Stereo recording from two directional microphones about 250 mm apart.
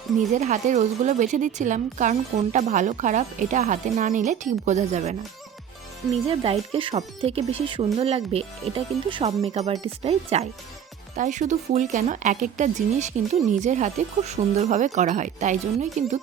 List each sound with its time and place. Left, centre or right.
0.3 s a woman's voice: right
6.2 s a woman's voice: right